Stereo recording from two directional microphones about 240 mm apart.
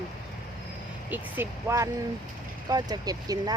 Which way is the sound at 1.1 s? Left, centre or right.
Centre.